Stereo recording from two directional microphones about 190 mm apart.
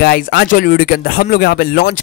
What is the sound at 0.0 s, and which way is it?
Speech, 55° left (ahead or behind).